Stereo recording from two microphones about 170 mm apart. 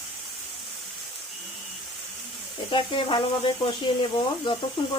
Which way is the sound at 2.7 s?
30° left (ahead or behind).